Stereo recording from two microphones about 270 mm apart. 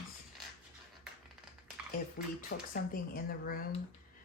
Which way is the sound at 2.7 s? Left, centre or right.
Left.